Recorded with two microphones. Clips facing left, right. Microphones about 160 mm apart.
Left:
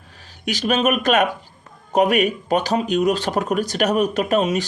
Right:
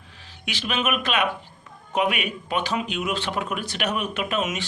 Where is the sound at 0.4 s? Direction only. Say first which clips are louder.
Left 8 dB; 45° left (ahead or behind).